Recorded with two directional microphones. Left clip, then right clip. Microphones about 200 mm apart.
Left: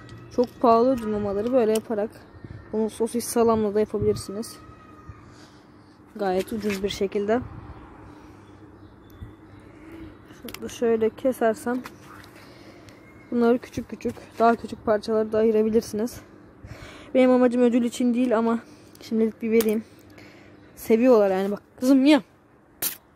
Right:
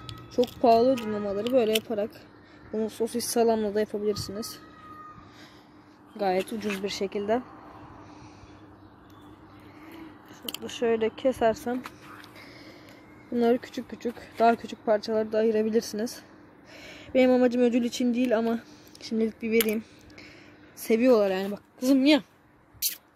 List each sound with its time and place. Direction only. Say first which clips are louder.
0.6 s speech: left 2 dB; 5° left (ahead or behind)
6.1 s speech: left 1 dB; centre (ahead or behind)
10.4 s a sound: even; 10° left (ahead or behind)
10.8 s speech: left 4 dB; 40° left (ahead or behind)
11.1 s speech: left 1 dB; 10° left (ahead or behind)
11.7 s a sound: left 3 dB; 5° right (ahead or behind)
13.3 s speech: left 3 dB; 5° left (ahead or behind)